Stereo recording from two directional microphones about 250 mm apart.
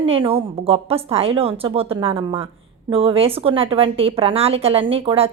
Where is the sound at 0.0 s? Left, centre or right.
Right.